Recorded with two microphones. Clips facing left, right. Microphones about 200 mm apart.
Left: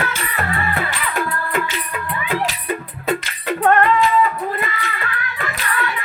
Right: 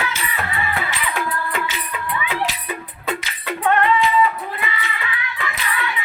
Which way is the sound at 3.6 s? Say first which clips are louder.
Left 3 dB; 45° left (ahead or behind).